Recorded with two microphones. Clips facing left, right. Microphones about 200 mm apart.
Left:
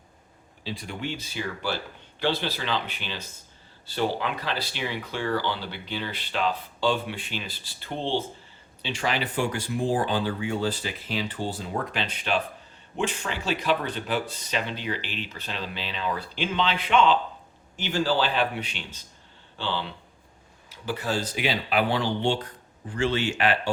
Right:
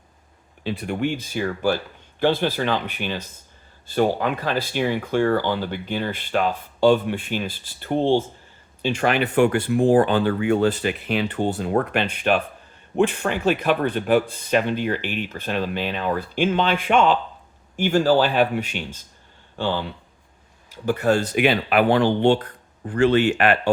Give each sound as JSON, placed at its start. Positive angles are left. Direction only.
{"t": 0.6, "sound": "speech", "side_deg": -65}